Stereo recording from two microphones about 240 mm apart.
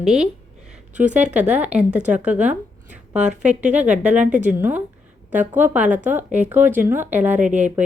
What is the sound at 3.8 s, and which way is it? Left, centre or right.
Speech, centre.